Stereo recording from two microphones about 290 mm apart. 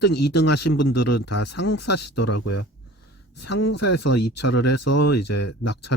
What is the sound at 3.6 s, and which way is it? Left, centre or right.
Speech, left.